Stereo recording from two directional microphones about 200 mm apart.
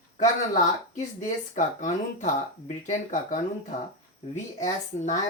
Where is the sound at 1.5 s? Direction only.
40° left (ahead or behind).